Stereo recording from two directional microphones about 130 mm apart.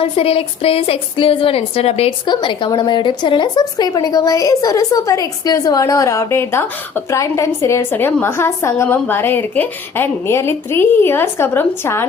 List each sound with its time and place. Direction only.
0.0 s a woman's voice: 45° left (ahead or behind)
2.2 s a woman's voice: 35° left (ahead or behind); by 12.0 s 20° left (ahead or behind)